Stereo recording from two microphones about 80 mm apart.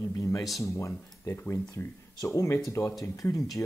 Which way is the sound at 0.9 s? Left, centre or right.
Left.